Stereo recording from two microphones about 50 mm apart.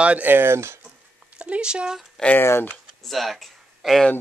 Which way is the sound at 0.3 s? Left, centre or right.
Right.